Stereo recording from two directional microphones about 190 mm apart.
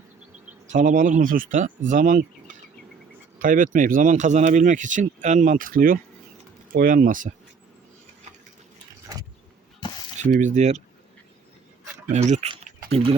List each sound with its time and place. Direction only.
0.7 s speech: 45° right (ahead or behind)
3.3 s speech: 45° right (ahead or behind)
10.3 s speech: 40° right (ahead or behind)
12.1 s speech: 35° right (ahead or behind)